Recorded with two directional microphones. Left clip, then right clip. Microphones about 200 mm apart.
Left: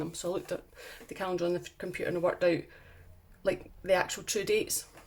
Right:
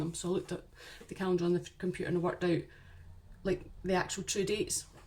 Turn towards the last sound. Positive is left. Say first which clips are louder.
# left 4 dB
turn(degrees=25)  # may be behind; listen again after turning